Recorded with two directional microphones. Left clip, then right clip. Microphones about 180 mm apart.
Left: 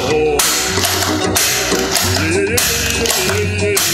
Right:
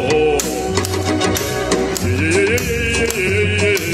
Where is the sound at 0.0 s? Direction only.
Centre (ahead or behind).